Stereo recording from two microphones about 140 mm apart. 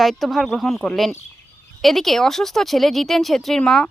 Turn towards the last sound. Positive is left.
turn(degrees=5)  # may be behind; listen again after turning